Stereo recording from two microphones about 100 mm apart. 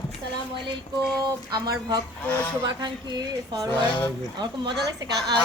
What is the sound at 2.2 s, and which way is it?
Speech, 15° left (ahead or behind).